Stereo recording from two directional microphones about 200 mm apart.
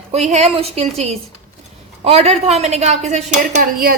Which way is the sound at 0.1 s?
35° right (ahead or behind).